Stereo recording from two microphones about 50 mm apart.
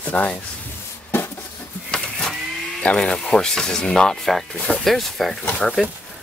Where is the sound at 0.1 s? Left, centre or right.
Left.